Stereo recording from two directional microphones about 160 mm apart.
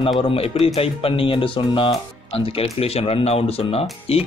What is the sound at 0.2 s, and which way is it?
Speech, 35° left (ahead or behind).